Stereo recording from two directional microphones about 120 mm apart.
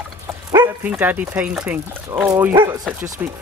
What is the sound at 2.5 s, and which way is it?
Speech, 20° right (ahead or behind).